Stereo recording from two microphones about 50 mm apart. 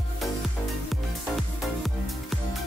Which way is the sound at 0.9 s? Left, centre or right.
Centre.